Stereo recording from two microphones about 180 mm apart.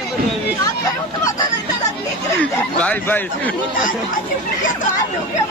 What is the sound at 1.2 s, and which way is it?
Speech, 20° left (ahead or behind).